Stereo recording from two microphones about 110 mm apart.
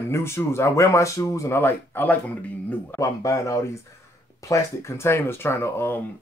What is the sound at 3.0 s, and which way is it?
Speech, 30° left (ahead or behind).